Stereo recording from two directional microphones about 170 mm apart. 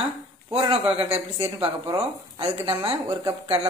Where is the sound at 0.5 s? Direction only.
35° right (ahead or behind).